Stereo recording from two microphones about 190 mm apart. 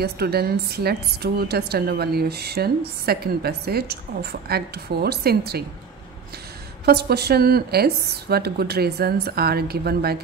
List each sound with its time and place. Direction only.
0.0 s speech: 55° right (ahead or behind)
6.9 s speech: 55° right (ahead or behind)